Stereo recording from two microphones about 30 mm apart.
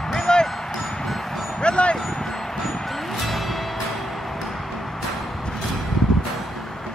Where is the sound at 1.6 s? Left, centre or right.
Left.